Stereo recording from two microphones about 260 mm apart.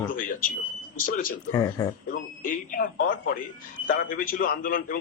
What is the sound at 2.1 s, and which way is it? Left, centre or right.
A man's voice, left.